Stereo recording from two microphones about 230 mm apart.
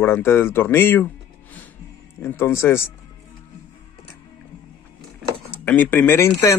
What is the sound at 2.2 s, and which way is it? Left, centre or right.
Speech, centre.